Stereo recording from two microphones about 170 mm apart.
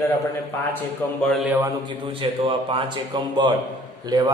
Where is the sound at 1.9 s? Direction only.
30° right (ahead or behind).